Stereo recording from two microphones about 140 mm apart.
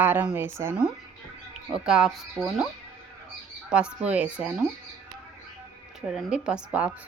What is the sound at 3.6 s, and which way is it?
Speech, 5° right (ahead or behind).